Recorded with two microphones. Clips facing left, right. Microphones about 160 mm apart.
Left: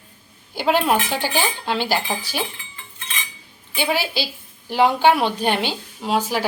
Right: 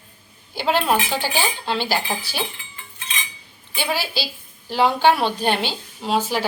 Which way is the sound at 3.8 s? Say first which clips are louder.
Left 2 dB; 20° left (ahead or behind).